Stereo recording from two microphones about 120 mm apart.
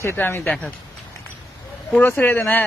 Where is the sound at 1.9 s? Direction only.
15° left (ahead or behind).